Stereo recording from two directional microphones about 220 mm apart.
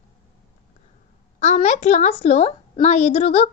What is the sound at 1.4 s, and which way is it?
A woman's voice, 30° left (ahead or behind).